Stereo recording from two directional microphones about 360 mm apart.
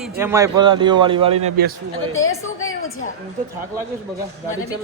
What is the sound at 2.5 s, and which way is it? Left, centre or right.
Speech, left.